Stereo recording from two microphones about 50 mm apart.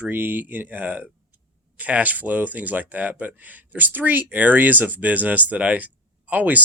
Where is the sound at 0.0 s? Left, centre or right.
Right.